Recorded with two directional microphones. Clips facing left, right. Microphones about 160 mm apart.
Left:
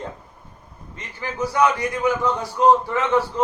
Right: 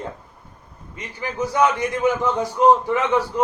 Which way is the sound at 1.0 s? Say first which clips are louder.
Right 1 dB; 20° right (ahead or behind).